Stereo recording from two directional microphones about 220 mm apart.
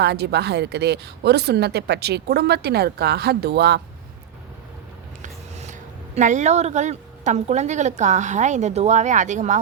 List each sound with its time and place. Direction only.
0.0 s a woman's voice: 50° right (ahead or behind)
5.2 s a sound: 30° right (ahead or behind)
6.1 s a woman's voice: 35° right (ahead or behind)